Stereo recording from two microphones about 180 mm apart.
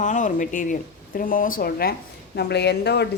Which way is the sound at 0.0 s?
45° left (ahead or behind).